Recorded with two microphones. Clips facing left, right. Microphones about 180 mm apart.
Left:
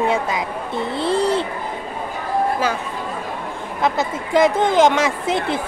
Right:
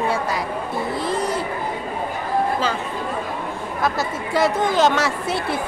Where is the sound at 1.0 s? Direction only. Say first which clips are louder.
Left 7 dB; 30° left (ahead or behind).